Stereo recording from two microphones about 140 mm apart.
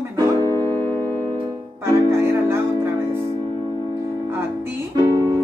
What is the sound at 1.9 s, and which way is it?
Music, 20° right (ahead or behind).